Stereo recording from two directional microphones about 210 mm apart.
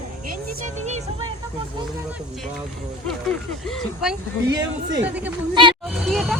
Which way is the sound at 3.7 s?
5° right (ahead or behind).